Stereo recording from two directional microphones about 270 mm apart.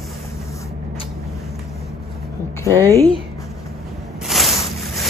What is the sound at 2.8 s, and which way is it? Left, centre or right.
Speech, centre.